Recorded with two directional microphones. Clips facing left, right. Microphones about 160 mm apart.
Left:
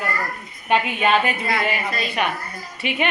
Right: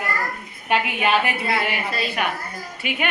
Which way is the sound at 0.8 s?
10° right (ahead or behind).